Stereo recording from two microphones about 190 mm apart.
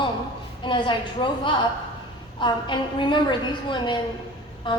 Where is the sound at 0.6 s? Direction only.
25° left (ahead or behind).